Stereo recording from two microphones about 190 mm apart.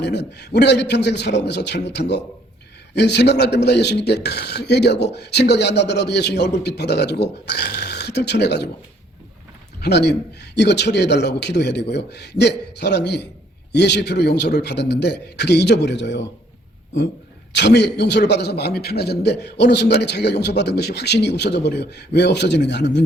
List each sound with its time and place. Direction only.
0.0 s a man's voice: 60° left (ahead or behind)
9.8 s a man's voice: 60° left (ahead or behind)
17.5 s a man's voice: 65° left (ahead or behind)